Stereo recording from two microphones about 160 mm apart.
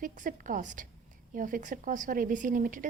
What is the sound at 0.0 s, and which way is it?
Speech, 60° right (ahead or behind).